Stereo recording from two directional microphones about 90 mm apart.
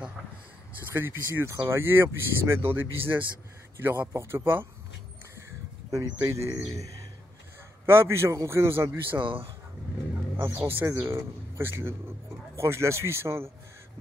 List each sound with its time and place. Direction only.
0.9 s speech: 30° right (ahead or behind)
5.9 s speech: 45° right (ahead or behind)
6.2 s speech: 35° right (ahead or behind)
9.1 s speech: 70° right (ahead or behind)
10.3 s speech: 25° right (ahead or behind)